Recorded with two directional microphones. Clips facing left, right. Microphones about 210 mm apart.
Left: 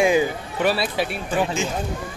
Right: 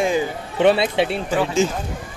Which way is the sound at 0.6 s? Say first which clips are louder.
Right 6 dB; 25° right (ahead or behind).